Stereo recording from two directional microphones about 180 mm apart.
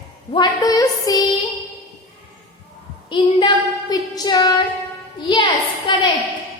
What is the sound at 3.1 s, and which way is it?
Child singing, 25° left (ahead or behind).